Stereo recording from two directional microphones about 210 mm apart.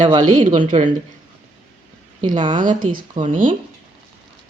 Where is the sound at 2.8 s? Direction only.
90° right.